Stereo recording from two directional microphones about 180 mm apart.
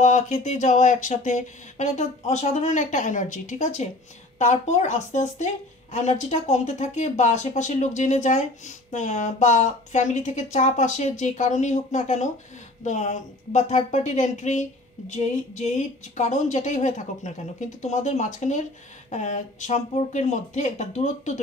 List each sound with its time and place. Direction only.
0.0 s speech: 45° left (ahead or behind)